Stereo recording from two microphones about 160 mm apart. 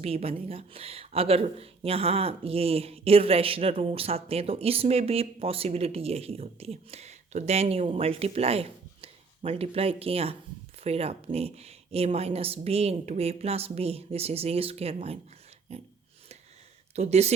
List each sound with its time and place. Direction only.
0.0 s speech: 35° right (ahead or behind)
16.9 s speech: 45° right (ahead or behind)